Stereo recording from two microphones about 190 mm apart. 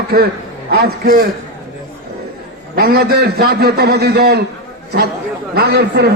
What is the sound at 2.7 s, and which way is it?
A man's voice, 55° right (ahead or behind).